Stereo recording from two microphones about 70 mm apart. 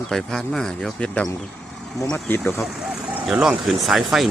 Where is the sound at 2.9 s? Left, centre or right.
Centre.